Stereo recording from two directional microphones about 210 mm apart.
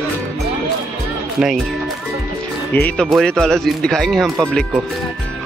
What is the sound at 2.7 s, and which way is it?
Speech, 10° left (ahead or behind).